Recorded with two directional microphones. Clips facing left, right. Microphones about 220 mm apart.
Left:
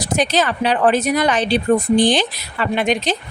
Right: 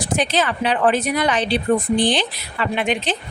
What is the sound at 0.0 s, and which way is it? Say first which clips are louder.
Speech: left 2 dB; 40° left (ahead or behind).